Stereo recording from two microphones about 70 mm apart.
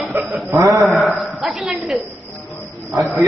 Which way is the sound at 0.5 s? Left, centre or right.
Right.